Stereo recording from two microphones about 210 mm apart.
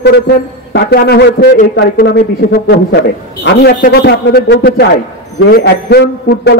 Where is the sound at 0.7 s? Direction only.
50° left (ahead or behind).